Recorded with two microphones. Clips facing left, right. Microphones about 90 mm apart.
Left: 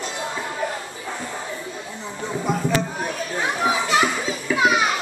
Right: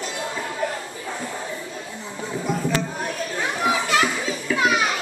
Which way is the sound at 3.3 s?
15° left (ahead or behind).